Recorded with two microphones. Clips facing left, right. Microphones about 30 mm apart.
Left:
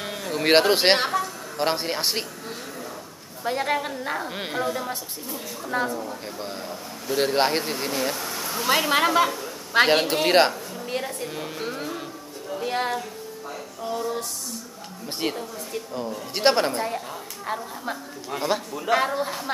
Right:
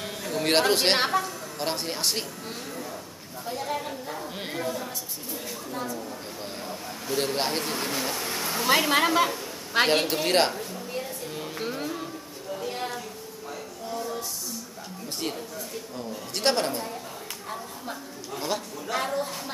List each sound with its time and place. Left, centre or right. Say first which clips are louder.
0.0 s a sound: left 3 dB; centre
0.9 s a man's voice: left 1 dB; centre
1.6 s a man's voice: left 5 dB; left
3.4 s a woman's voice: left 6 dB; left
4.3 s a man's voice: left 4 dB; left
5.7 s a woman's voice: left 9 dB; left
7.2 s a man's voice: left 6 dB; left
7.8 s speech: left 3 dB; centre
8.3 s a sound: even; centre
8.5 s a woman's voice: left 1 dB; centre
11.2 s music: left 2 dB; centre
12.6 s a sound: left 7 dB; left
15.1 s a man's voice: left 5 dB; left
18.5 s a man's voice: left 7 dB; centre